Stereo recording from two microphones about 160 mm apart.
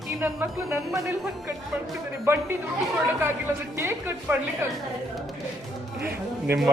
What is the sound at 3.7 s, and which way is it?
Music, 15° right (ahead or behind).